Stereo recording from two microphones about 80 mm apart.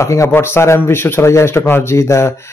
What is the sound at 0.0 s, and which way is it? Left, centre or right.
Speech, left.